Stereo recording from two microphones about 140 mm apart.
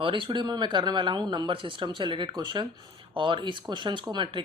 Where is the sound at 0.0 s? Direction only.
35° right (ahead or behind).